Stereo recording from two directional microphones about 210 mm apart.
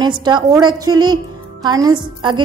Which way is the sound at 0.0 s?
20° right (ahead or behind).